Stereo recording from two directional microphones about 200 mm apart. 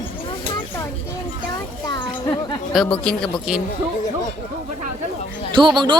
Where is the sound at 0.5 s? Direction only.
15° left (ahead or behind).